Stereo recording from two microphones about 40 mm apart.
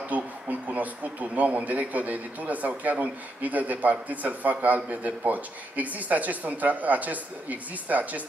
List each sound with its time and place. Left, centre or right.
0.1 s a man's voice: right